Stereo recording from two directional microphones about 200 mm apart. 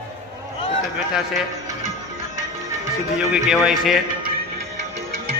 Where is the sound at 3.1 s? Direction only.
5° right (ahead or behind).